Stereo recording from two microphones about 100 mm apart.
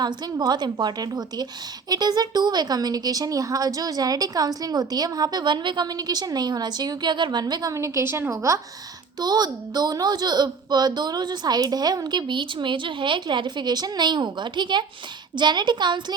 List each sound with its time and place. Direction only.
0.0 s a woman's voice: 45° right (ahead or behind)
9.2 s speech: 45° right (ahead or behind)